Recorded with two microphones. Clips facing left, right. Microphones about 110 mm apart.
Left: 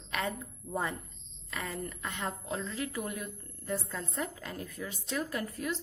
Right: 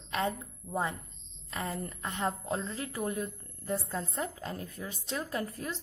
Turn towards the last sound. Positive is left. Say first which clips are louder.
# even
turn(degrees=-30)  # may be behind; listen again after turning